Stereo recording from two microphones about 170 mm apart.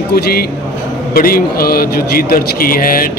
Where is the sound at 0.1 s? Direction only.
65° left (ahead or behind).